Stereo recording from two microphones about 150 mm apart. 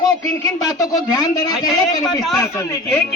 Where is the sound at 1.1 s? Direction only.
25° left (ahead or behind).